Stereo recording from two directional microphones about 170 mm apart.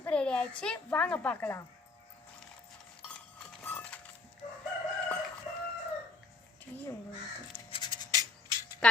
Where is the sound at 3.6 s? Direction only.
10° left (ahead or behind).